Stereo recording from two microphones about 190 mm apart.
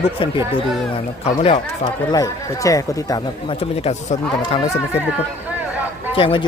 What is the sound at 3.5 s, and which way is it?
Speech, 35° left (ahead or behind).